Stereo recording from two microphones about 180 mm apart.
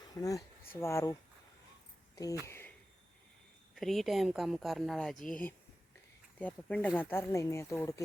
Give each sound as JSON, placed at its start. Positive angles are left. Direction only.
{"t": 0.2, "sound": "speech", "side_deg": 20}
{"t": 2.5, "sound": "a sound", "side_deg": 10}
{"t": 3.8, "sound": "speech", "side_deg": 0}